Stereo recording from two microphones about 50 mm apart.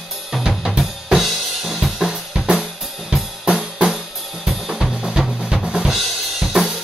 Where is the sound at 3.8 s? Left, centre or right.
Centre.